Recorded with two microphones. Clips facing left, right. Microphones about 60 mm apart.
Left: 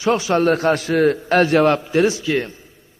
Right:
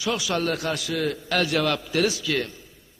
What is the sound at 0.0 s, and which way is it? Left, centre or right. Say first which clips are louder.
A man's voice: left 9 dB; left.